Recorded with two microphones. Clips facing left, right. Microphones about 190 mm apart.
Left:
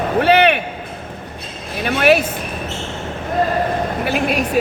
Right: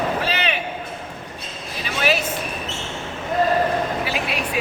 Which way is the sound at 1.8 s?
60° left (ahead or behind).